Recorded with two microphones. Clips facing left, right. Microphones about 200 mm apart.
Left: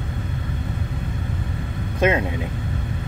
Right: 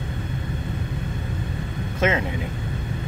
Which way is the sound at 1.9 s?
15° left (ahead or behind).